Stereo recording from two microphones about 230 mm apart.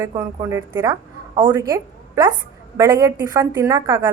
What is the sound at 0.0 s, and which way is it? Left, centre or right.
A woman's voice, centre.